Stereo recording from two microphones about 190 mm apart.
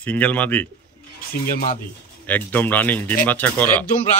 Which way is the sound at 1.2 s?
50° left (ahead or behind).